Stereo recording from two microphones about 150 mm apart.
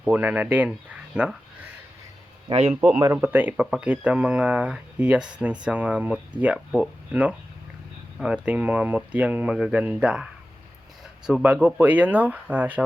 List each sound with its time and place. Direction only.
0.0 s speech: 10° right (ahead or behind)
0.7 s a sound: 5° right (ahead or behind)
2.5 s speech: 40° right (ahead or behind)
3.0 s speech: 15° right (ahead or behind)
11.3 s speech: centre (ahead or behind)